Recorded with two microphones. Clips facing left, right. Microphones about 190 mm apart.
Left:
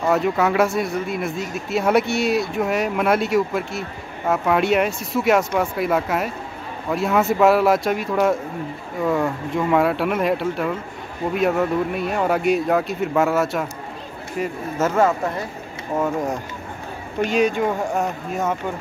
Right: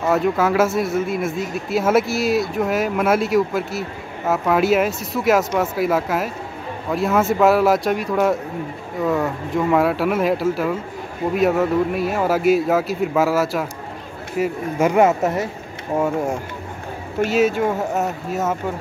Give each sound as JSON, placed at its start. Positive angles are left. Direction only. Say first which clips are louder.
{"t": 0.0, "sound": "a man's voice", "louder": "right 1 dB", "side_deg": 0}
{"t": 14.4, "sound": "speech", "louder": "right 4 dB", "side_deg": -15}
{"t": 16.0, "sound": "a man's voice", "louder": "right 2 dB", "side_deg": -10}